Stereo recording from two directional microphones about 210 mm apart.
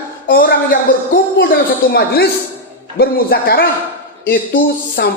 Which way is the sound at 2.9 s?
45° left (ahead or behind).